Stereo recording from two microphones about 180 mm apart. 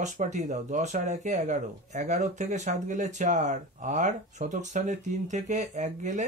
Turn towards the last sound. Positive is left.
turn(degrees=-40)  # may be behind; listen again after turning